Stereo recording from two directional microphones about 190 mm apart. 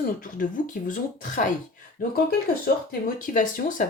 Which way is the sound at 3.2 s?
45° left (ahead or behind).